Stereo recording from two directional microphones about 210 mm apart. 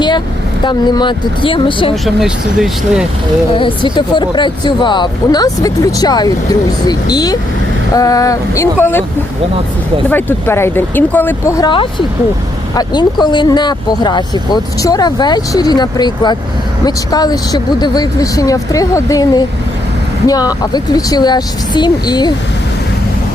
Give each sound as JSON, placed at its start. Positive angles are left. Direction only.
{"t": 0.6, "sound": "speech", "side_deg": 20}
{"t": 2.0, "sound": "speech", "side_deg": -5}
{"t": 3.9, "sound": "speech", "side_deg": 20}
{"t": 10.1, "sound": "speech", "side_deg": 10}